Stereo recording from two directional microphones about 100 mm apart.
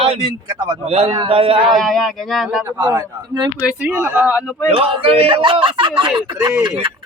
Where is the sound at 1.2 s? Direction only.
70° right (ahead or behind).